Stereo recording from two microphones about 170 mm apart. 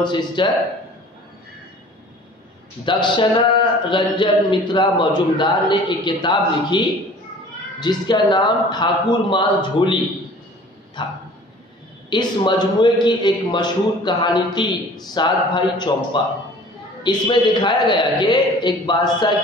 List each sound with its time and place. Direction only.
0.0 s speech: 25° left (ahead or behind)
2.8 s speech: 30° left (ahead or behind)
11.0 s speech: 25° left (ahead or behind)